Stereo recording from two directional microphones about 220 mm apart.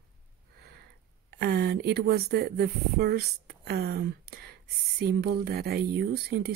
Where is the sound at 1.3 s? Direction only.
45° right (ahead or behind).